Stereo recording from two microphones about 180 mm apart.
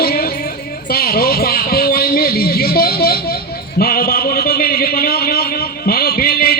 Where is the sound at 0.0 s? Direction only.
60° left (ahead or behind).